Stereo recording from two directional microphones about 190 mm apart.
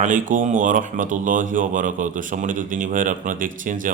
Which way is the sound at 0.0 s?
45° right (ahead or behind).